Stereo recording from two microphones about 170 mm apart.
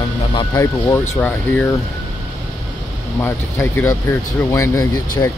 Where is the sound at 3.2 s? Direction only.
15° left (ahead or behind).